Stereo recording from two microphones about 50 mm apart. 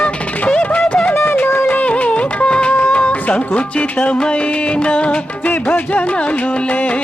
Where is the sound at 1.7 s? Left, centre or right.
Left.